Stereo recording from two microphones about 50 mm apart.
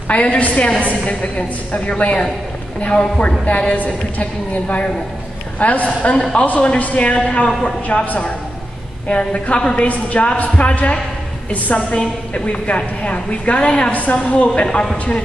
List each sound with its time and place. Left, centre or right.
0.1 s a man's voice: left
14.7 s a man's voice: centre